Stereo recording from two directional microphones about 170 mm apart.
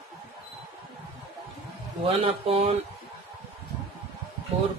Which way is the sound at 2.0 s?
35° right (ahead or behind).